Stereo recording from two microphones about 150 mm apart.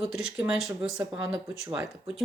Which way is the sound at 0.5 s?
Centre (ahead or behind).